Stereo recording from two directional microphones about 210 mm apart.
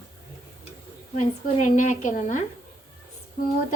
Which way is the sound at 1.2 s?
35° left (ahead or behind).